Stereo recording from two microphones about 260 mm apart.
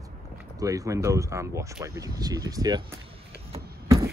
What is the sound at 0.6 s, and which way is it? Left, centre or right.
Speech, centre.